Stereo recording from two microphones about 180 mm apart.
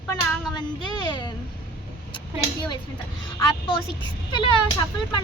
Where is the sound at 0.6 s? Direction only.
25° left (ahead or behind).